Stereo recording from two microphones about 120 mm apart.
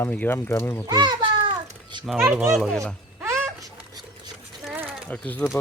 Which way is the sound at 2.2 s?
20° right (ahead or behind).